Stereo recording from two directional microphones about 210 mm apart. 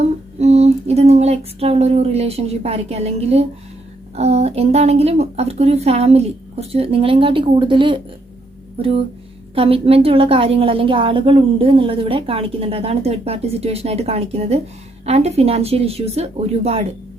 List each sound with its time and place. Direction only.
0.0 s a sound: 30° right (ahead or behind)
4.1 s a woman's voice: 30° right (ahead or behind)
9.6 s a woman's voice: 25° right (ahead or behind)